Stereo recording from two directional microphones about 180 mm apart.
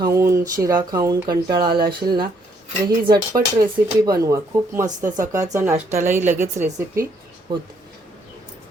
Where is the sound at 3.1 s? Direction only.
20° right (ahead or behind).